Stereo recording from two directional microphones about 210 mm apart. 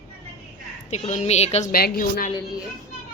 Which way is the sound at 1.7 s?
45° left (ahead or behind).